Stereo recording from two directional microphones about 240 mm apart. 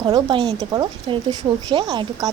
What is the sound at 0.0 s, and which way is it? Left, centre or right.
Speech, centre.